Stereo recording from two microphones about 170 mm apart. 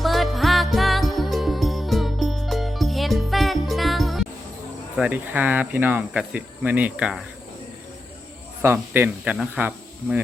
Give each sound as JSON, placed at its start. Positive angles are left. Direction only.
{"t": 0.0, "sound": "music", "side_deg": 0}
{"t": 4.9, "sound": "speech", "side_deg": -10}
{"t": 8.6, "sound": "speech", "side_deg": -15}